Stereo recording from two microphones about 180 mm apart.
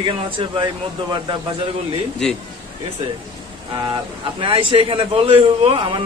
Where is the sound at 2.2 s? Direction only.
5° left (ahead or behind).